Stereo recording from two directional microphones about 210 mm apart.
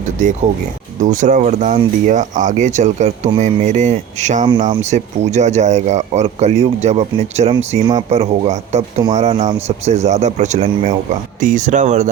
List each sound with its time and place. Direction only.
1.0 s speech: 35° right (ahead or behind)
9.0 s speech: 20° right (ahead or behind)
9.4 s speech: 30° right (ahead or behind)